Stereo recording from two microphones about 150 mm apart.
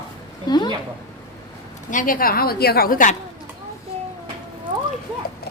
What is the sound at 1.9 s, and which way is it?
A woman's voice, 65° left (ahead or behind).